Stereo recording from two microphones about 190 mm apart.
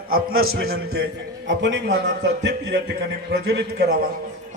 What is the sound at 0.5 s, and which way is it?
Speech, 50° right (ahead or behind).